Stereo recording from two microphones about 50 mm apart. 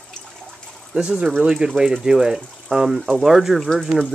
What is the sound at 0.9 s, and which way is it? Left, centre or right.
Speech, centre.